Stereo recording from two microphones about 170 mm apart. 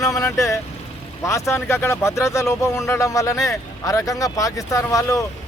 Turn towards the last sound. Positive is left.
turn(degrees=20)  # may be behind; listen again after turning